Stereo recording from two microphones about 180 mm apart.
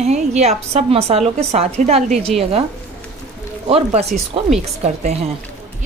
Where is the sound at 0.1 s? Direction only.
40° right (ahead or behind).